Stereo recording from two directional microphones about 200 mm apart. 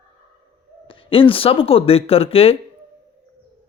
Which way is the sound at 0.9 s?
25° left (ahead or behind).